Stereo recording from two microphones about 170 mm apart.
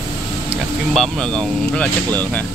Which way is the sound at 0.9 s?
5° left (ahead or behind).